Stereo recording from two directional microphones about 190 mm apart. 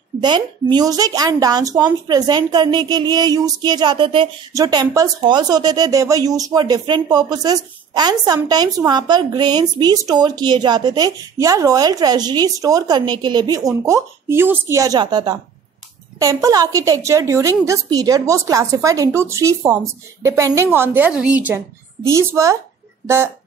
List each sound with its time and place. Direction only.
0.2 s a woman's voice: 25° right (ahead or behind)